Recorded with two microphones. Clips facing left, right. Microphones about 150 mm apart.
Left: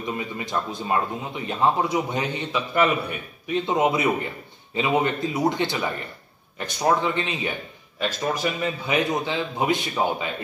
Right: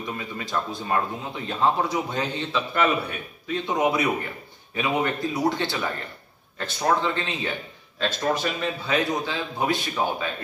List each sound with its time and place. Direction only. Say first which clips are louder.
0.0 s a man's voice: left 3 dB; 20° left (ahead or behind)